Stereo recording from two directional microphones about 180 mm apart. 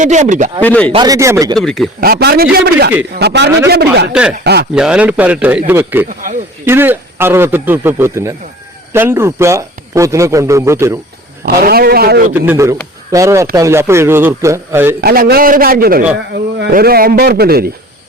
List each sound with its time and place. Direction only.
0.0 s a man's voice: 40° right (ahead or behind)
0.6 s speech: 10° left (ahead or behind)
0.9 s speech: 20° right (ahead or behind)
1.5 s speech: centre (ahead or behind)
2.0 s a man's voice: 60° right (ahead or behind)
4.1 s a man's voice: 5° right (ahead or behind)
11.4 s speech: 55° right (ahead or behind)
12.3 s a man's voice: 15° right (ahead or behind)
15.0 s a man's voice: 55° right (ahead or behind)
16.3 s speech: 65° right (ahead or behind)